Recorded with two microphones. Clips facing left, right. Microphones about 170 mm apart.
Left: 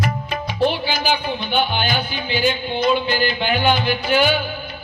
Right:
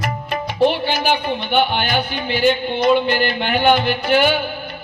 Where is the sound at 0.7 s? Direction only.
60° right (ahead or behind).